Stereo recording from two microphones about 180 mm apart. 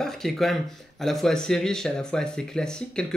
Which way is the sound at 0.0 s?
5° left (ahead or behind).